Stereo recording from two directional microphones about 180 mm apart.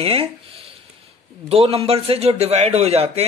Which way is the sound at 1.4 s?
35° right (ahead or behind).